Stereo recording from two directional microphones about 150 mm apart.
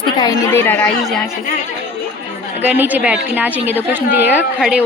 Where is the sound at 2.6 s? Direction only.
10° right (ahead or behind).